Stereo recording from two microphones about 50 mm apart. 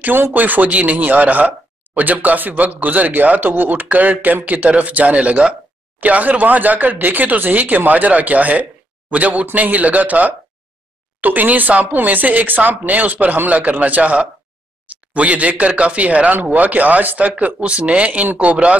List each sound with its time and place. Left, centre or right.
0.0 s speech: right